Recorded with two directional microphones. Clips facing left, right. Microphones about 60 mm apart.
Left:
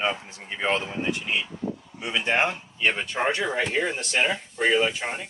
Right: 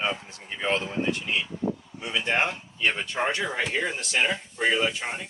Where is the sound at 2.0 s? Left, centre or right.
Left.